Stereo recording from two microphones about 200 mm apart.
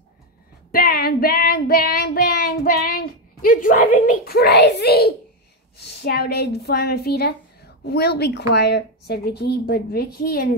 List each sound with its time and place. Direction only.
0.7 s child singing: 50° left (ahead or behind)
5.9 s a woman's voice: 55° left (ahead or behind)